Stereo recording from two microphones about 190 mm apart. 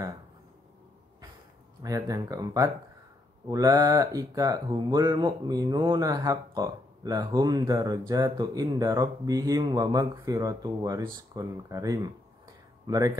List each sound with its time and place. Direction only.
1.8 s speech: 15° right (ahead or behind)